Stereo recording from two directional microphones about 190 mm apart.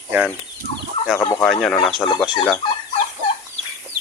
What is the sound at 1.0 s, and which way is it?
Chicken, 35° left (ahead or behind).